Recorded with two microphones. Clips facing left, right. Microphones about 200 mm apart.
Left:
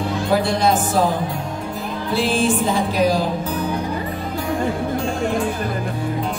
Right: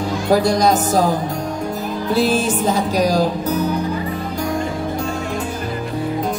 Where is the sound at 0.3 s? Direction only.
40° right (ahead or behind).